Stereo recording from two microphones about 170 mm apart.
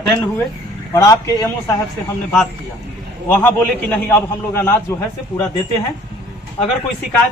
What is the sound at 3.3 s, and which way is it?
Speech, 10° left (ahead or behind).